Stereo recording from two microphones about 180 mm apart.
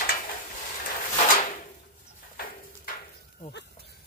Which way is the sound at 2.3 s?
55° left (ahead or behind).